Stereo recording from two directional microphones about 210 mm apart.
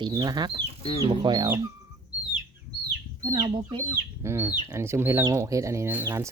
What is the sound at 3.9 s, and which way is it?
Speech, 10° right (ahead or behind).